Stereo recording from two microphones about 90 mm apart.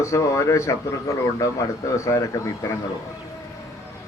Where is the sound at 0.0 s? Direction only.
35° left (ahead or behind).